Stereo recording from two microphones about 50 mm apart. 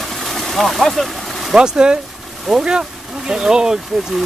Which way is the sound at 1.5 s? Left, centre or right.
Centre.